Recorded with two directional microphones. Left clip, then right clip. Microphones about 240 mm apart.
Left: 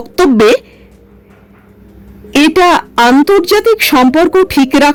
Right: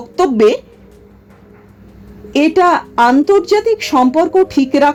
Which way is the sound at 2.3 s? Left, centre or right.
Left.